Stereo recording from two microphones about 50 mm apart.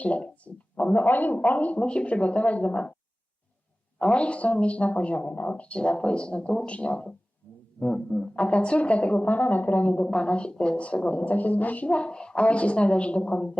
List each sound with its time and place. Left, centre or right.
0.0 s a woman's voice: left
3.9 s a woman's voice: left
7.4 s music: left
7.8 s a woman's voice: left
10.1 s a woman's voice: centre